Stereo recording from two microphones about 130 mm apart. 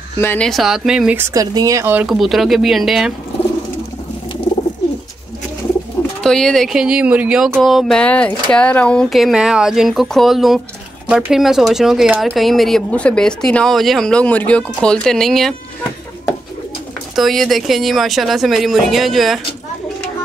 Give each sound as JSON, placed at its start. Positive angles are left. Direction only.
{"t": 0.4, "sound": "speech", "side_deg": 0}
{"t": 1.3, "sound": "speech", "side_deg": -30}
{"t": 1.9, "sound": "speech", "side_deg": -10}
{"t": 6.2, "sound": "speech", "side_deg": 5}
{"t": 17.1, "sound": "speech", "side_deg": 0}